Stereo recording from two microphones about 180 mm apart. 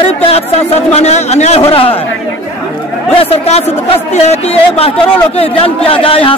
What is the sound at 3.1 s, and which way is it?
Speech, 35° left (ahead or behind).